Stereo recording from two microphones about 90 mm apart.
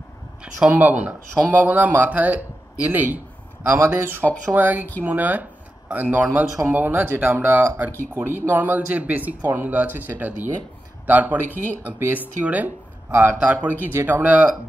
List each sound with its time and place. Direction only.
0.4 s speech: 15° right (ahead or behind)
3.7 s speech: 30° right (ahead or behind)